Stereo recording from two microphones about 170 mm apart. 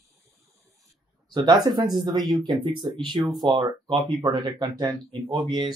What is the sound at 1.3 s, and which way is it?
Speech, 20° right (ahead or behind).